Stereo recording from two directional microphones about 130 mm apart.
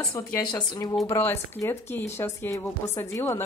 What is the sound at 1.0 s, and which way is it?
Speech, 15° left (ahead or behind).